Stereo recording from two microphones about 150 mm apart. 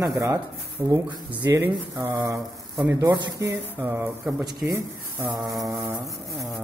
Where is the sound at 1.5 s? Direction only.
15° right (ahead or behind).